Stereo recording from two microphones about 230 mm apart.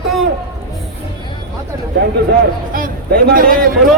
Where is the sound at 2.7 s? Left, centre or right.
Right.